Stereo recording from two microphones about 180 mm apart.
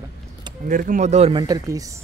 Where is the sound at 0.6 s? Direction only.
50° right (ahead or behind).